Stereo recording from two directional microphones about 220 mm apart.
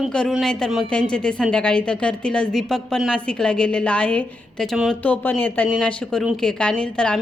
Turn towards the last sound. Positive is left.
turn(degrees=5)  # may be behind; listen again after turning